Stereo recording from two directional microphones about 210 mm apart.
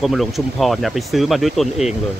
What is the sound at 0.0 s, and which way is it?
Speech, centre (ahead or behind).